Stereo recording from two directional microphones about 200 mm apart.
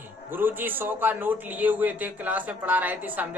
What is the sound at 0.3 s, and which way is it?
A man's voice, 10° right (ahead or behind).